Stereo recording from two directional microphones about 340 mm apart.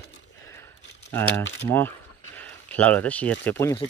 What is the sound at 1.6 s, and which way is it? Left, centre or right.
Speech, centre.